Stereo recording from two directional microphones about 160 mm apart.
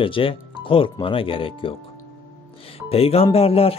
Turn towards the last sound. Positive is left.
turn(degrees=40)  # may be behind; listen again after turning